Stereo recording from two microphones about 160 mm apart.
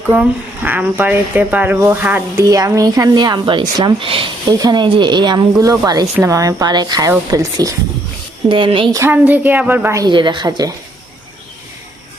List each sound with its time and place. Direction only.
0.1 s speech: 10° right (ahead or behind)
8.4 s a woman's voice: 30° right (ahead or behind)
8.9 s a woman's voice: 15° right (ahead or behind)
10.1 s speech: 30° right (ahead or behind)